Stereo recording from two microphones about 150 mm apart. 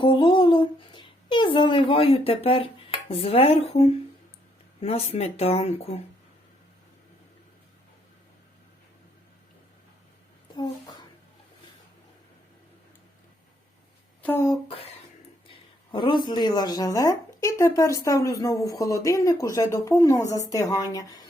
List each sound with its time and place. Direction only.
0.0 s a sound: 30° left (ahead or behind)
4.8 s speech: 45° left (ahead or behind)
14.2 s speech: 15° left (ahead or behind)
15.4 s speech: 35° left (ahead or behind)